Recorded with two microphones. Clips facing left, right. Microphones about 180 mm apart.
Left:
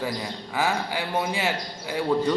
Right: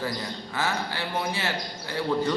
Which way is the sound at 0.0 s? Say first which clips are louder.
Left 2 dB; 15° left (ahead or behind).